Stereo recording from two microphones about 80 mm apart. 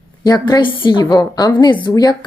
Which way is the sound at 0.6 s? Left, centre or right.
Left.